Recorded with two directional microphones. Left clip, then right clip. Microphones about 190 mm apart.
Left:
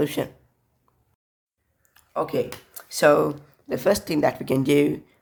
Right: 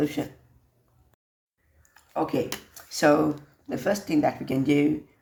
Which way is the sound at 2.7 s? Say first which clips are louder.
Left 4 dB; 35° left (ahead or behind).